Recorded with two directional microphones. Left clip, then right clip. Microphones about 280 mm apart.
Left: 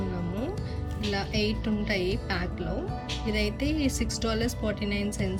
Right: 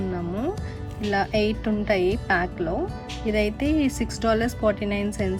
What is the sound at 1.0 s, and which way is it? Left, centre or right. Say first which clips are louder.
A woman's voice: right 7 dB; centre.